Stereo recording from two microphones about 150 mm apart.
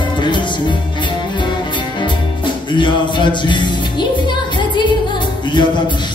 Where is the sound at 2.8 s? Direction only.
30° left (ahead or behind).